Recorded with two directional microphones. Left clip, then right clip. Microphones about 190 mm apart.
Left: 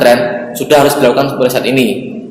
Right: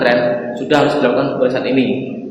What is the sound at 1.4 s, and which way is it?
Speech, 50° left (ahead or behind).